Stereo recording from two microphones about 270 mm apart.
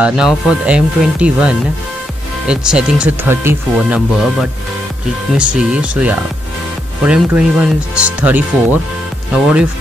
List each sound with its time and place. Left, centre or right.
0.0 s speech: centre